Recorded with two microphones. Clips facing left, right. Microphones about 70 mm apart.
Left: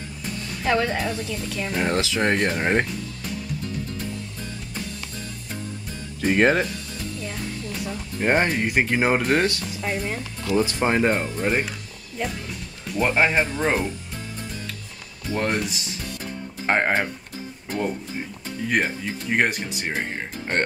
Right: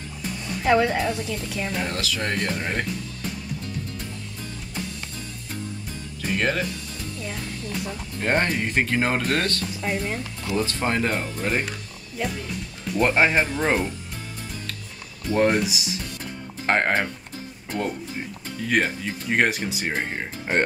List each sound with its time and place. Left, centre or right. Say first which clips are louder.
0.5 s speech: right 3 dB; centre
1.9 s speech: left 6 dB; left
2.3 s speech: left 4 dB; left
2.6 s speech: left 6 dB; left
6.3 s speech: left 5 dB; left
8.2 s speech: left 2 dB; centre
9.8 s speech: even; centre
10.5 s speech: left 4 dB; centre
12.2 s speech: right 1 dB; centre
15.3 s speech: right 4 dB; centre
16.6 s speech: even; centre